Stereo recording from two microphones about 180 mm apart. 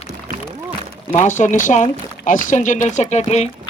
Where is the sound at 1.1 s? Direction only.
40° left (ahead or behind).